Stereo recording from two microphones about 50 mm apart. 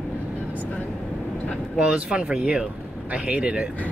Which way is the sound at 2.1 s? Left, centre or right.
Right.